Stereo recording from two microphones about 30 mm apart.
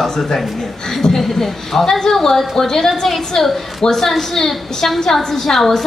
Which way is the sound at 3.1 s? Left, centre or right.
Centre.